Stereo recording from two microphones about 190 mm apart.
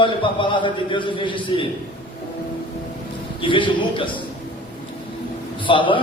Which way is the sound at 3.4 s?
25° left (ahead or behind).